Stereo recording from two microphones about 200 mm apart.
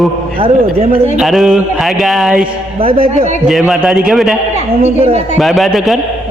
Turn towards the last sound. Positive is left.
turn(degrees=0)  # may be behind; listen again after turning